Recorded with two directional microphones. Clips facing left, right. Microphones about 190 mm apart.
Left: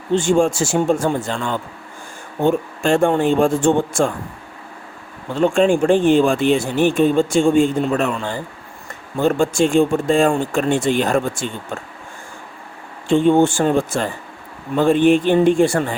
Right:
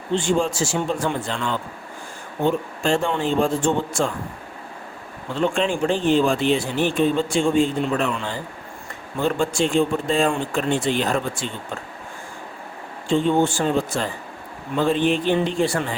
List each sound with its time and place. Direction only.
0.1 s speech: 45° left (ahead or behind)
5.3 s speech: 45° left (ahead or behind)
13.1 s speech: 55° left (ahead or behind)